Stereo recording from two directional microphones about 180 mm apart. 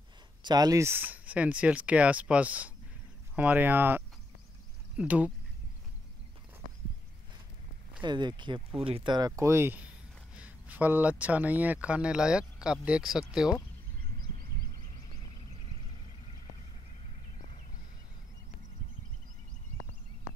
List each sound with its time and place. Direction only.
0.4 s speech: 25° right (ahead or behind); by 5.3 s 5° right (ahead or behind)
8.0 s speech: 25° right (ahead or behind)
9.4 s speech: 15° right (ahead or behind)